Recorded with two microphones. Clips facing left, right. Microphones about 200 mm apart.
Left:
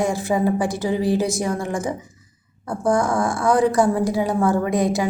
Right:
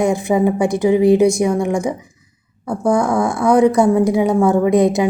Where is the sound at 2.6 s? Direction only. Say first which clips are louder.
Right 4 dB; centre (ahead or behind).